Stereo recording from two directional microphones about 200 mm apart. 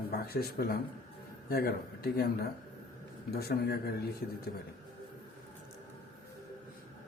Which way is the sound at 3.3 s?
50° left (ahead or behind).